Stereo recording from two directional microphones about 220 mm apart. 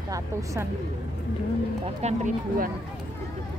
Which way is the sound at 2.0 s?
30° right (ahead or behind).